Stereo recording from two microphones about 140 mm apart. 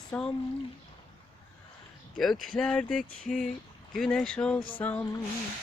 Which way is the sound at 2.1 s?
Centre (ahead or behind).